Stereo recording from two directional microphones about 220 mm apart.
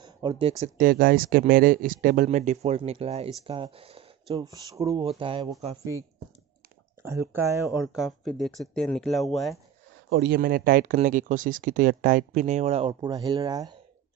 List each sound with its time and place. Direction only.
0.0 s speech: 20° right (ahead or behind)
7.0 s speech: 10° right (ahead or behind)
7.8 s speech: centre (ahead or behind)
10.0 s speech: 50° right (ahead or behind); by 13.7 s 15° right (ahead or behind)